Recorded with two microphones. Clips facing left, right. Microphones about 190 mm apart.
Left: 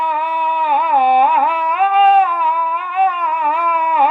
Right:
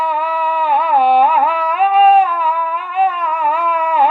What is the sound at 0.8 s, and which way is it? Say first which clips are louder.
Carnatic music: right 1 dB; centre (ahead or behind).